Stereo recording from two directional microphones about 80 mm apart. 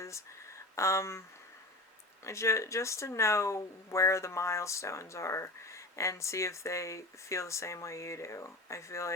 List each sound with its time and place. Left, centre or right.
0.8 s speech: left
2.2 s speech: left